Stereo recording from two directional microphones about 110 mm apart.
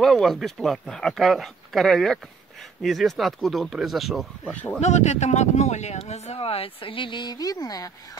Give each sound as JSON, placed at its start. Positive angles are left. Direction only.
{"t": 0.0, "sound": "speech", "side_deg": 0}
{"t": 4.5, "sound": "speech", "side_deg": 15}
{"t": 4.7, "sound": "speech", "side_deg": 90}